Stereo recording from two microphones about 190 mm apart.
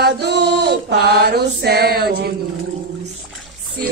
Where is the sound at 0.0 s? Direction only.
60° right (ahead or behind).